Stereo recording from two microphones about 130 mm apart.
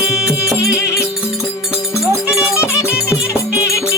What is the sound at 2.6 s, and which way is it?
Music, 20° left (ahead or behind).